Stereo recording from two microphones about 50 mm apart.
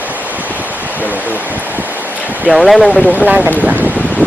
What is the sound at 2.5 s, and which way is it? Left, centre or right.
Speech, centre.